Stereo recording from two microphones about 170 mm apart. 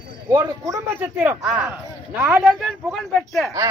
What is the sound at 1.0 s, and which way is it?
Speech, 10° right (ahead or behind).